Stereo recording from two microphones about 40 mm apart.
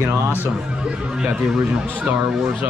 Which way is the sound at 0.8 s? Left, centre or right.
Right.